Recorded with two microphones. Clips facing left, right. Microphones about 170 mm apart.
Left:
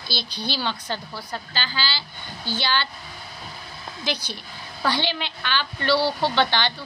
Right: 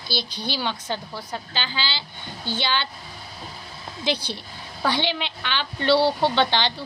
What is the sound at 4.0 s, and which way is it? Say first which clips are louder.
A woman's voice: right 4 dB; 30° right (ahead or behind).